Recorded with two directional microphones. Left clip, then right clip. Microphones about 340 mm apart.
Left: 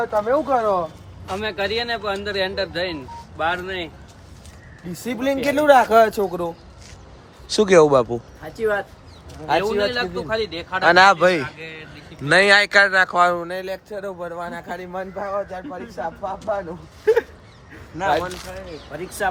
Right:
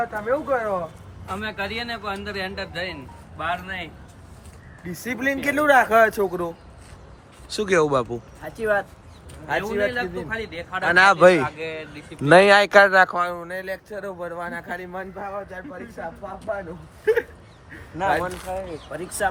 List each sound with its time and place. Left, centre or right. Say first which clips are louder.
0.1 s speech: left 4 dB; centre
4.9 s speech: left 2 dB; centre
9.5 s speech: left 4 dB; centre
11.2 s speech: right 3 dB; centre
11.4 s speech: right 4 dB; centre
11.9 s speech: right 3 dB; centre
13.1 s speech: left 7 dB; centre
17.9 s speech: left 2 dB; centre